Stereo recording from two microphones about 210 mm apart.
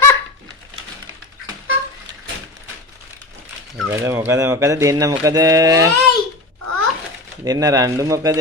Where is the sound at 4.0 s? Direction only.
10° right (ahead or behind).